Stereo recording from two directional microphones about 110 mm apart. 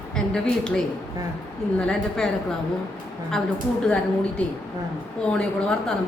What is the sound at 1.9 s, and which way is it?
Speech, 5° left (ahead or behind).